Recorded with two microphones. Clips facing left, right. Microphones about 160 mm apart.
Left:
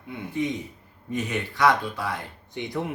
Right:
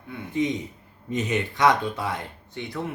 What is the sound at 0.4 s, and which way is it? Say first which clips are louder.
Speech: right 3 dB; 20° right (ahead or behind).